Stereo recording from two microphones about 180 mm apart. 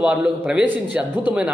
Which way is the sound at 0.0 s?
5° right (ahead or behind).